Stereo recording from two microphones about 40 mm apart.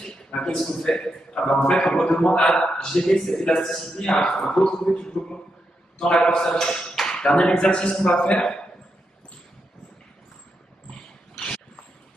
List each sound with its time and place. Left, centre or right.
0.0 s a man's voice: left